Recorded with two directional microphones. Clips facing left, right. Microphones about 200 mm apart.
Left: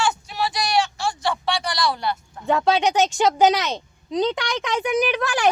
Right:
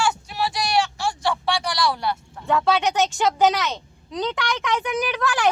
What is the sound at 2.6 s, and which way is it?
A woman's voice, 15° left (ahead or behind).